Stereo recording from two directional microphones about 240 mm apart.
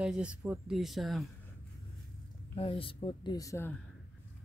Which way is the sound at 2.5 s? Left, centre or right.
Left.